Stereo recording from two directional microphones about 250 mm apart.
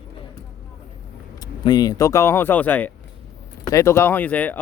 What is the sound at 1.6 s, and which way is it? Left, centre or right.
Speech, centre.